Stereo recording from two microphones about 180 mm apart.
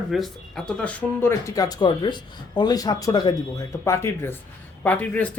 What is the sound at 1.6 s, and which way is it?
Speech, 20° left (ahead or behind).